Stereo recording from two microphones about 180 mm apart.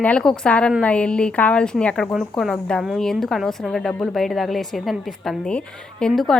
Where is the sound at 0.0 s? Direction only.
5° left (ahead or behind).